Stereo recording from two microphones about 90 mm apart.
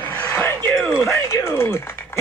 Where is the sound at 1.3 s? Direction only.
30° left (ahead or behind).